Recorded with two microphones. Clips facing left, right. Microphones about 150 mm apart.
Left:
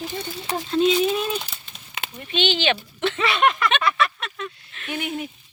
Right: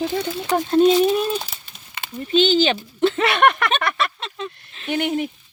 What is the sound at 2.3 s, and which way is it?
Speech, 40° right (ahead or behind).